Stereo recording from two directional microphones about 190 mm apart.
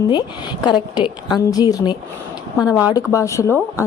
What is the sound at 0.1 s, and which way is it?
A woman's voice, 25° left (ahead or behind).